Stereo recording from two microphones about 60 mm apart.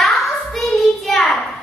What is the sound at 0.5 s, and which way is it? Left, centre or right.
Child singing, centre.